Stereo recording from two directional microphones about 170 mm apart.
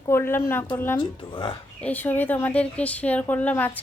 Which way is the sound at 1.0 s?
30° left (ahead or behind).